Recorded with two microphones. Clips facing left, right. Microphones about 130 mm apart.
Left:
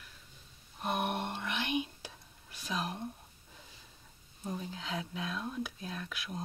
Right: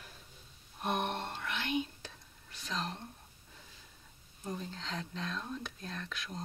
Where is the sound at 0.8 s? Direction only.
5° left (ahead or behind).